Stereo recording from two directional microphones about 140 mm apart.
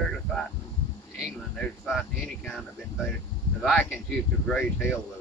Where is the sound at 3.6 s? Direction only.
Centre (ahead or behind).